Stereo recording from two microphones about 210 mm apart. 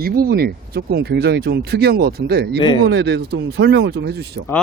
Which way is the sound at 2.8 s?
55° right (ahead or behind).